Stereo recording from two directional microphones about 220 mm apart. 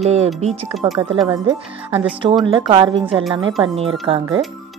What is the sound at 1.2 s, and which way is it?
Speech, 15° right (ahead or behind).